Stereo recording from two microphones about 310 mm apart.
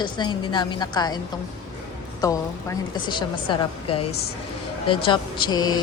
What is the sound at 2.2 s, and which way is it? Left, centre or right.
A woman's voice, centre.